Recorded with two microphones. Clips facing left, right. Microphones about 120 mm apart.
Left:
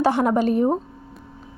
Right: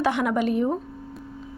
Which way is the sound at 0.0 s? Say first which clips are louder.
Left 4 dB; 35° left (ahead or behind).